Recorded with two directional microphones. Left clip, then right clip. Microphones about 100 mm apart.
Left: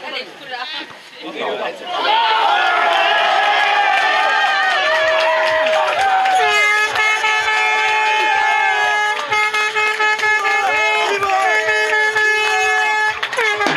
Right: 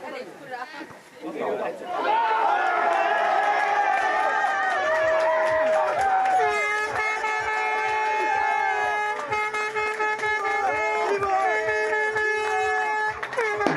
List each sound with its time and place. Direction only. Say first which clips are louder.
2.0 s crowd: left 7 dB; 30° left (ahead or behind)